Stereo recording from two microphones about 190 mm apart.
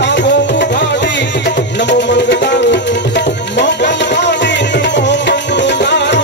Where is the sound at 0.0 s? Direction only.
70° left (ahead or behind).